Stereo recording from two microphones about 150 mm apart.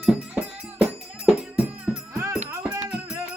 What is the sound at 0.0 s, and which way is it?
Music, 5° right (ahead or behind).